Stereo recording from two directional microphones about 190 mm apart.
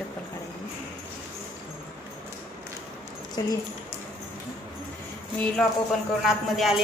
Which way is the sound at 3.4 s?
20° left (ahead or behind).